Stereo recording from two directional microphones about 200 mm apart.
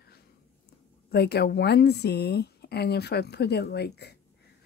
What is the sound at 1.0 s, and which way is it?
Speech, 55° left (ahead or behind).